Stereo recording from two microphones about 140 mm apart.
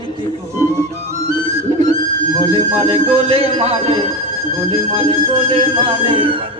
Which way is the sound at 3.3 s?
45° right (ahead or behind).